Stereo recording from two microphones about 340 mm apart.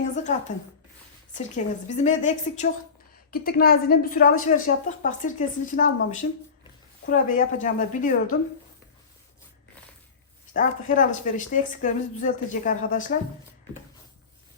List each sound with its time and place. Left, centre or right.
0.0 s a sound: left
1.3 s a woman's voice: left
10.5 s a woman's voice: left